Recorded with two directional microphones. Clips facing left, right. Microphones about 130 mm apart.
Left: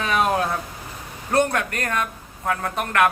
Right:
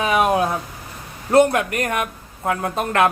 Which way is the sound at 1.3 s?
20° right (ahead or behind).